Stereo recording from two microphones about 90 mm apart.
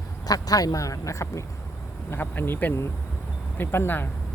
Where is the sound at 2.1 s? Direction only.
25° left (ahead or behind).